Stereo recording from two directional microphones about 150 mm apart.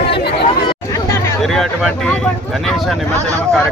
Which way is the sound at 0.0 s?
90° left.